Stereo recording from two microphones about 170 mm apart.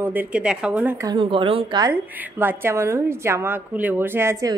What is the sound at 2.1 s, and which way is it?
A woman's voice, 10° right (ahead or behind).